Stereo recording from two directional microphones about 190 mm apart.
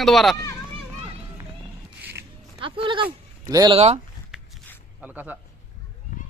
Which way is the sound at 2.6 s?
25° right (ahead or behind).